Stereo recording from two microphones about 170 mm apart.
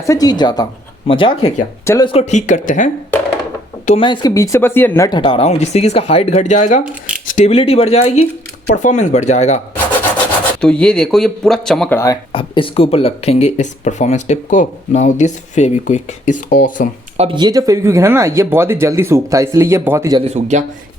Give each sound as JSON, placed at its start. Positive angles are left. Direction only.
{"t": 0.0, "sound": "speech", "side_deg": 20}
{"t": 1.8, "sound": "speech", "side_deg": 15}
{"t": 2.0, "sound": "speech", "side_deg": 40}
{"t": 3.8, "sound": "speech", "side_deg": 30}
{"t": 5.0, "sound": "speech", "side_deg": 30}
{"t": 10.6, "sound": "speech", "side_deg": 5}
{"t": 12.3, "sound": "speech", "side_deg": 30}
{"t": 17.2, "sound": "speech", "side_deg": -30}
{"t": 20.1, "sound": "a man's voice", "side_deg": -40}